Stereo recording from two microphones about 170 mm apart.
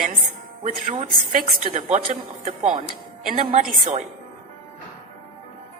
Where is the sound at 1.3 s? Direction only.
45° right (ahead or behind).